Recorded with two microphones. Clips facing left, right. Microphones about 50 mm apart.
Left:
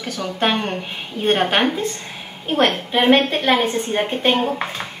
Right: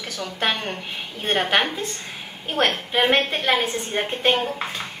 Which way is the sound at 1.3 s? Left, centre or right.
Centre.